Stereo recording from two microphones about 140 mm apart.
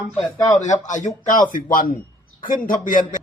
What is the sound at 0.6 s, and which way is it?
Speech, 60° left (ahead or behind).